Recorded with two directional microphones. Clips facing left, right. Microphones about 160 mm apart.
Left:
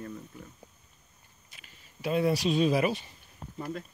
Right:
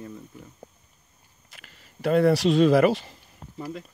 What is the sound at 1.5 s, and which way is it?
Speech, 75° right (ahead or behind).